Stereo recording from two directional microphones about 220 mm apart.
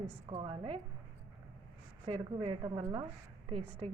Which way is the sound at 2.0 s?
25° right (ahead or behind).